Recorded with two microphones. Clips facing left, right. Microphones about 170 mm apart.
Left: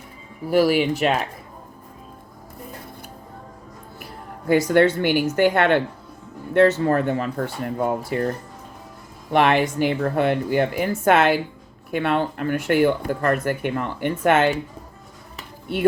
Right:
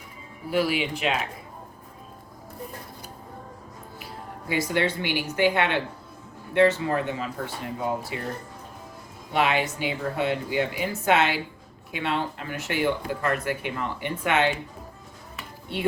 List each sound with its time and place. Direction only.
0.5 s speech: 45° left (ahead or behind)
4.7 s speech: 50° left (ahead or behind)
9.3 s speech: 50° left (ahead or behind)